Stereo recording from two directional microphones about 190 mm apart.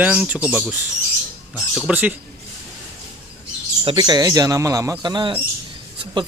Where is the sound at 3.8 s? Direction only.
25° right (ahead or behind).